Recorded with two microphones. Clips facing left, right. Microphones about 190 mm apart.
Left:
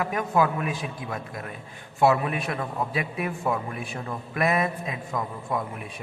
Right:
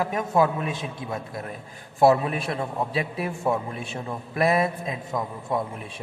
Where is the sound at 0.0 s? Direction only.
25° right (ahead or behind).